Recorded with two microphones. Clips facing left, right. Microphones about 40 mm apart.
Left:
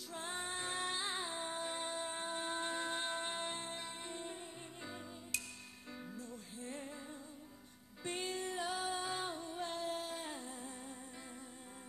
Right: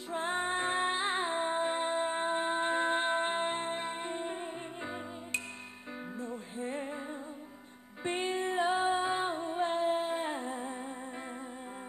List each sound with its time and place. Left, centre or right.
0.1 s music: right
8.0 s music: right